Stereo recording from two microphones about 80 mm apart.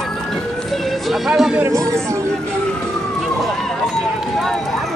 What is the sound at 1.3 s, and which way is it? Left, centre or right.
Speech, centre.